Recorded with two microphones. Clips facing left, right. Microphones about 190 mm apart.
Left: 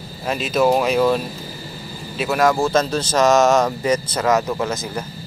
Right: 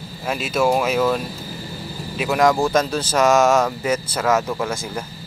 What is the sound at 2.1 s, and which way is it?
Speech, 15° right (ahead or behind).